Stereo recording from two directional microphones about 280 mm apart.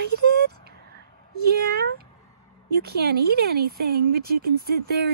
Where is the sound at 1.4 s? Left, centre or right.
Right.